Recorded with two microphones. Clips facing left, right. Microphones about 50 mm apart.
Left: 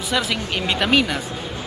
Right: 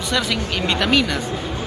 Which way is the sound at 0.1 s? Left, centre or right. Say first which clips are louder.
Even; centre.